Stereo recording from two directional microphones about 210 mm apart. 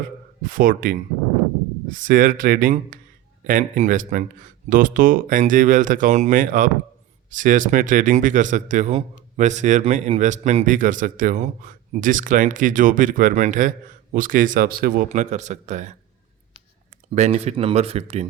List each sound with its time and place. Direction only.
0.4 s a man's voice: 40° right (ahead or behind)
17.2 s speech: 30° right (ahead or behind)